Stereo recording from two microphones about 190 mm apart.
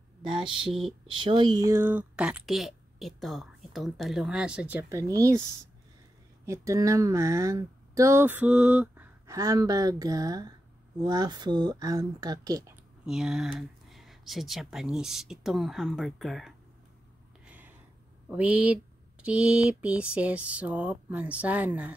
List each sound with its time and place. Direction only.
0.2 s speech: 25° right (ahead or behind)
0.7 s speech: centre (ahead or behind)
1.0 s speech: 25° right (ahead or behind)
6.4 s speech: 15° right (ahead or behind)
13.0 s speech: 5° right (ahead or behind)
18.3 s speech: 5° right (ahead or behind)